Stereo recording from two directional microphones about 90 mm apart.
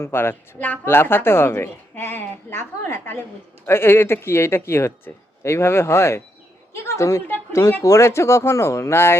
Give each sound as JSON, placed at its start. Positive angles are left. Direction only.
{"t": 0.0, "sound": "a woman's voice", "side_deg": 25}